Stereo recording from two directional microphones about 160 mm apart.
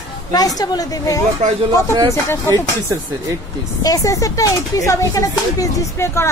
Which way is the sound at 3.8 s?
20° left (ahead or behind).